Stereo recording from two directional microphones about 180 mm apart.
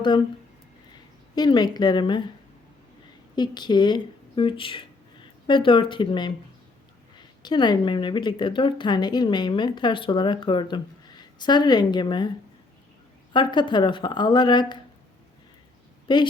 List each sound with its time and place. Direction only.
1.4 s a woman's voice: 25° left (ahead or behind)
3.3 s a woman's voice: 25° left (ahead or behind)
7.4 s a woman's voice: 25° left (ahead or behind)
13.3 s a woman's voice: 25° left (ahead or behind)
16.1 s a woman's voice: 25° left (ahead or behind)